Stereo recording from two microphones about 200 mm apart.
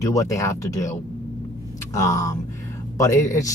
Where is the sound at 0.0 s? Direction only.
15° left (ahead or behind).